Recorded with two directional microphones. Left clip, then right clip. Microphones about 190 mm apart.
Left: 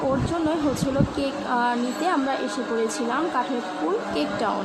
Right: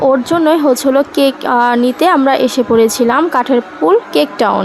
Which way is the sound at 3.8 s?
65° right (ahead or behind).